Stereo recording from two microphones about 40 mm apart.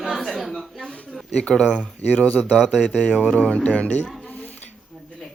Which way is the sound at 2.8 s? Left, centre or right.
Centre.